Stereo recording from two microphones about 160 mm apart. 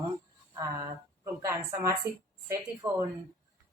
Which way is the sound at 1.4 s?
20° right (ahead or behind).